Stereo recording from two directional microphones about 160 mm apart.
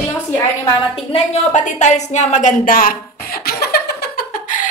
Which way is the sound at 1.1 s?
45° left (ahead or behind).